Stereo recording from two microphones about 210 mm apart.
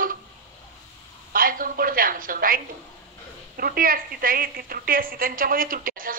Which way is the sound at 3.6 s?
45° right (ahead or behind).